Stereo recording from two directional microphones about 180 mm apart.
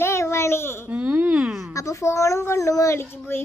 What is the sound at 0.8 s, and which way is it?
Speech, 10° right (ahead or behind).